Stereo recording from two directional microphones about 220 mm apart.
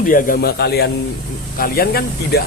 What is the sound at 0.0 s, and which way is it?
Speech, 40° left (ahead or behind).